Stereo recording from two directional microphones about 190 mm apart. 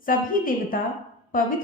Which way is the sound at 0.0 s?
45° left (ahead or behind).